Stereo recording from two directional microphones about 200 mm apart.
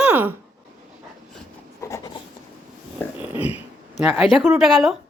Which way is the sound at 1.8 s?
15° left (ahead or behind).